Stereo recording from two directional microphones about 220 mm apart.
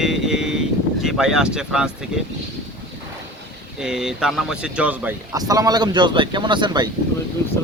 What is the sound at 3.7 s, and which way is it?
Speech, 5° right (ahead or behind).